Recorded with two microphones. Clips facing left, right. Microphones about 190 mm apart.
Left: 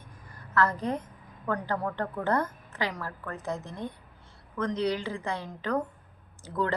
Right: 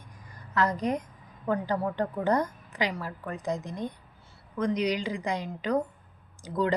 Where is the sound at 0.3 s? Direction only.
15° right (ahead or behind).